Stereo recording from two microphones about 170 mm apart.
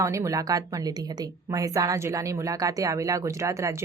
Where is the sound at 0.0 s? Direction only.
20° right (ahead or behind).